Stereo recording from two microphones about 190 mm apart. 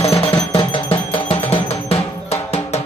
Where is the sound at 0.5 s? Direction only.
25° left (ahead or behind).